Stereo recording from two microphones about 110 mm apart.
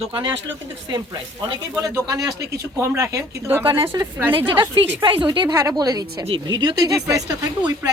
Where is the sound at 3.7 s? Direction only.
50° right (ahead or behind).